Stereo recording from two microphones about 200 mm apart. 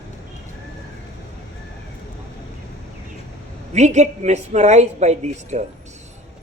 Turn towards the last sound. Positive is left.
turn(degrees=-35)  # may be behind; listen again after turning